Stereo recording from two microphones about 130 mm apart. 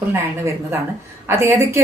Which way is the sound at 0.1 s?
20° right (ahead or behind).